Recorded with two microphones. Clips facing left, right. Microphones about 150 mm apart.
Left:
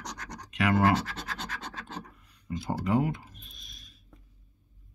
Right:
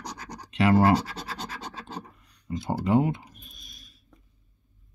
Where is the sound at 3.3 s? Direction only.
5° right (ahead or behind).